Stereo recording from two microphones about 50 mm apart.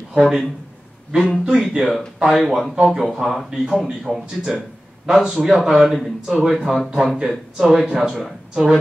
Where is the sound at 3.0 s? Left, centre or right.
Centre.